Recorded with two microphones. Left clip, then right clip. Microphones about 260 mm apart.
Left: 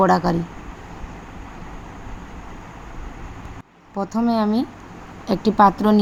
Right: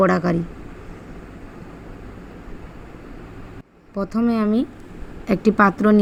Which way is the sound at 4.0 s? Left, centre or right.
Centre.